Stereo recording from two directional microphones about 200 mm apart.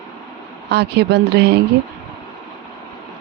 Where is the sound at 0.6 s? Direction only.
55° right (ahead or behind).